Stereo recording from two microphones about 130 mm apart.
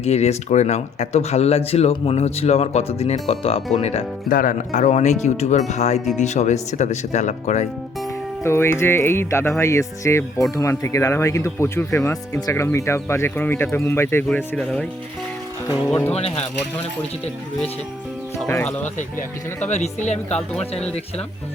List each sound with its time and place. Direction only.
0.0 s speech: 55° left (ahead or behind)
4.3 s speech: 90° left; by 7.7 s 65° left (ahead or behind)
8.4 s speech: 20° left (ahead or behind)
14.3 s speech: 5° left (ahead or behind)
16.1 s speech: 50° left (ahead or behind)
19.6 s speech: 65° left (ahead or behind)